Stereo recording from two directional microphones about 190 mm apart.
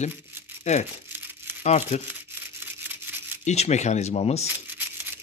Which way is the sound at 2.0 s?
10° right (ahead or behind).